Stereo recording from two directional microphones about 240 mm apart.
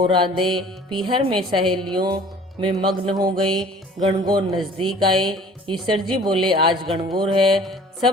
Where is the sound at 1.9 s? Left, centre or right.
Centre.